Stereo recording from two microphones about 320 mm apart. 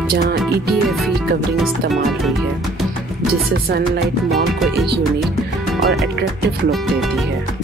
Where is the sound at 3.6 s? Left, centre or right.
Right.